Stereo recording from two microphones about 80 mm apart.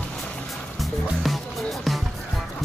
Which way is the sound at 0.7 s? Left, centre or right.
Centre.